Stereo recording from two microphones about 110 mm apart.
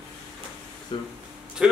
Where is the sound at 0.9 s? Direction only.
50° left (ahead or behind).